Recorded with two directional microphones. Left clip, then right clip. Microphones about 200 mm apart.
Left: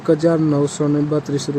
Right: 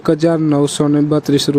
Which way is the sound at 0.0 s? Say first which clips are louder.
Right 2 dB; 40° right (ahead or behind).